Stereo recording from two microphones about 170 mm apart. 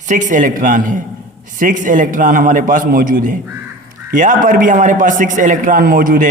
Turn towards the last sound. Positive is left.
turn(degrees=-55)  # may be behind; listen again after turning